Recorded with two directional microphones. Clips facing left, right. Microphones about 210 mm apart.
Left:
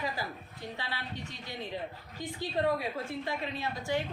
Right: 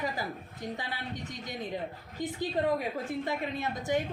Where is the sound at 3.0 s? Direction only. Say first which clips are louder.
Right 3 dB; 20° right (ahead or behind).